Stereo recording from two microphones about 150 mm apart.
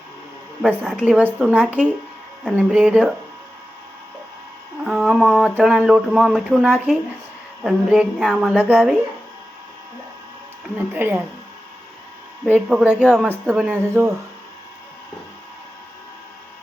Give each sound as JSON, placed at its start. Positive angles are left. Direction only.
{"t": 0.6, "sound": "a woman's voice", "side_deg": -10}
{"t": 4.8, "sound": "a sound", "side_deg": -5}
{"t": 5.5, "sound": "speech", "side_deg": -5}
{"t": 10.8, "sound": "a woman's voice", "side_deg": -10}
{"t": 12.5, "sound": "a woman's voice", "side_deg": -5}